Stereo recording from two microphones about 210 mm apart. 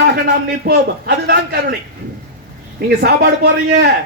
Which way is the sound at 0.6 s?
50° right (ahead or behind).